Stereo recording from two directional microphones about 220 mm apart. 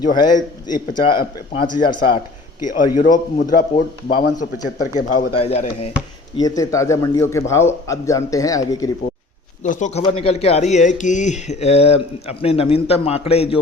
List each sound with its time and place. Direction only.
0.1 s speech: 20° left (ahead or behind)
3.0 s speech: 40° left (ahead or behind)
4.5 s speech: 15° left (ahead or behind)
6.4 s a man's voice: 15° left (ahead or behind)
9.6 s speech: 35° left (ahead or behind)